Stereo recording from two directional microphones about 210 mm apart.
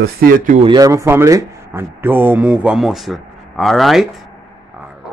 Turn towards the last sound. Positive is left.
turn(degrees=0)  # may be behind; listen again after turning